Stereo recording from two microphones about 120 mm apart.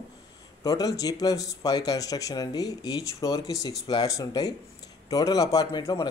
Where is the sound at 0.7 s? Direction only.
30° left (ahead or behind).